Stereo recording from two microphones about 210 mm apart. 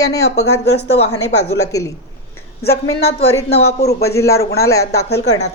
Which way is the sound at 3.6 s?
50° left (ahead or behind).